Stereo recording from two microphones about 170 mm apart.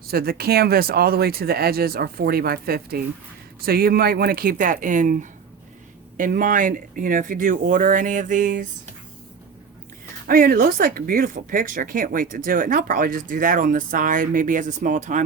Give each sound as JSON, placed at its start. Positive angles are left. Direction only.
{"t": 0.1, "sound": "speech", "side_deg": -65}
{"t": 10.2, "sound": "speech", "side_deg": -55}